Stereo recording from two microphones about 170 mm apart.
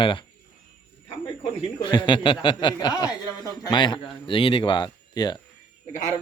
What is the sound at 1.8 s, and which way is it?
A man's voice, 25° left (ahead or behind).